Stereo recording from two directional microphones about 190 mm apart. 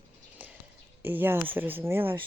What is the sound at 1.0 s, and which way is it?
Speech, 10° right (ahead or behind).